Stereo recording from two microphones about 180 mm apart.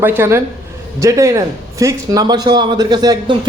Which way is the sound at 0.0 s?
10° right (ahead or behind).